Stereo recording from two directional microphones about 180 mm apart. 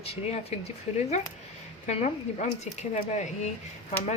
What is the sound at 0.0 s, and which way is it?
Speech, 35° left (ahead or behind).